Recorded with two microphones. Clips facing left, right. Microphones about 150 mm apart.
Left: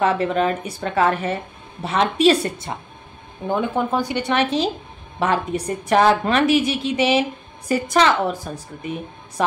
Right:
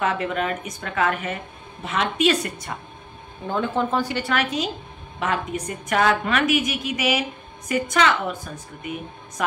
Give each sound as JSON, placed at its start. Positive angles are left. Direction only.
{"t": 0.0, "sound": "a woman's voice", "side_deg": 35}
{"t": 3.4, "sound": "a woman's voice", "side_deg": 15}